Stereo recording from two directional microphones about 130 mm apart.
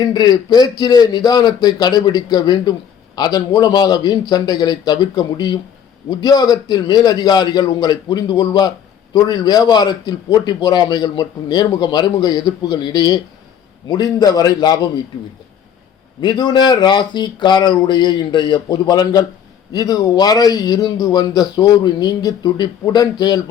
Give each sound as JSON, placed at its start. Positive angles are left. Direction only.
{"t": 0.0, "sound": "a man's voice", "side_deg": 35}
{"t": 16.2, "sound": "a man's voice", "side_deg": 35}